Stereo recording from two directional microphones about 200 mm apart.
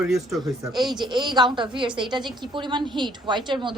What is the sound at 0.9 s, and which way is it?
A woman's voice, 20° right (ahead or behind).